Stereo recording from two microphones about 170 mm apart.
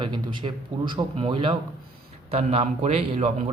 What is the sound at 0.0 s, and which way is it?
A man's voice, 30° right (ahead or behind).